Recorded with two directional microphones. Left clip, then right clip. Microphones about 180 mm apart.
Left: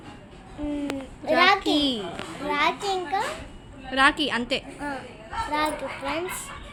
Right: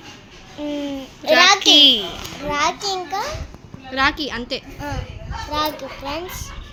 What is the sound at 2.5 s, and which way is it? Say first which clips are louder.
Speech: right 3 dB; 15° right (ahead or behind).